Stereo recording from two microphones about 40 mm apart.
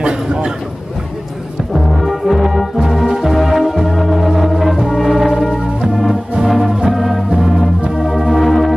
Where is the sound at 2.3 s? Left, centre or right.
Centre.